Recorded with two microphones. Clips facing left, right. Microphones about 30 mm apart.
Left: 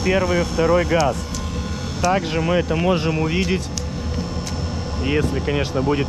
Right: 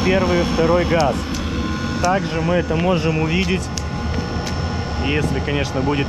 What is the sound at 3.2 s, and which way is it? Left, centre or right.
Speech, right.